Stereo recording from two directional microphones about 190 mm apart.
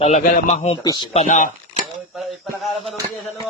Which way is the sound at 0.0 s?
35° left (ahead or behind).